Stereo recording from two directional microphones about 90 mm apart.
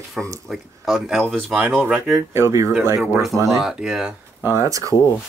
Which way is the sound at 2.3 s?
35° right (ahead or behind).